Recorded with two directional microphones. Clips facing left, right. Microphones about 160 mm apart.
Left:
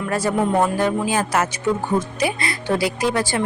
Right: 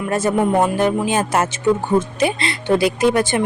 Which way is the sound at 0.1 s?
20° right (ahead or behind).